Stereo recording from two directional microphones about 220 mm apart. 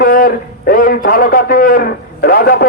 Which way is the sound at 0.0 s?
40° left (ahead or behind).